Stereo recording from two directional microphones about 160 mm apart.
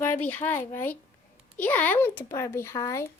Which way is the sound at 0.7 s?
15° left (ahead or behind).